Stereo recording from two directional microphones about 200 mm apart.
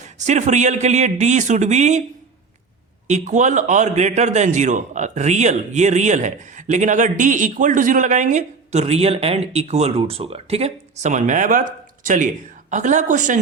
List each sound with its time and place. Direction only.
0.0 s a man's voice: 35° right (ahead or behind)
3.1 s a man's voice: 35° right (ahead or behind)